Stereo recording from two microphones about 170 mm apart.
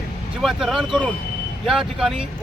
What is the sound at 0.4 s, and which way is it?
Speech, centre (ahead or behind).